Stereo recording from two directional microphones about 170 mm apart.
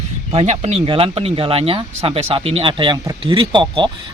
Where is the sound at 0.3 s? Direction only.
35° right (ahead or behind).